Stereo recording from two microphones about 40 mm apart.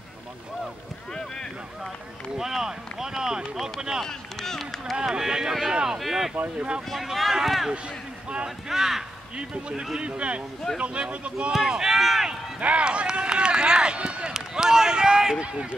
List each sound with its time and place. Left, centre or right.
2.3 s speech: centre
4.0 s speech: centre
4.9 s speech: centre
5.9 s speech: centre
6.3 s speech: right
6.9 s speech: centre
9.4 s speech: right
11.6 s speech: centre
12.0 s speech: centre
12.5 s speech: right
14.3 s speech: centre